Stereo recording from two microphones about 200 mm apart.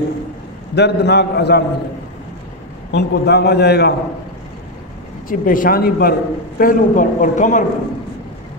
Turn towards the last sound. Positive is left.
turn(degrees=40)  # may be behind; listen again after turning